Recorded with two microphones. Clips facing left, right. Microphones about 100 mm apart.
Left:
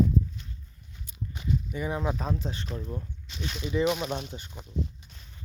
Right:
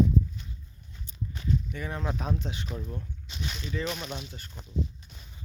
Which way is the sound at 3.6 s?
15° left (ahead or behind).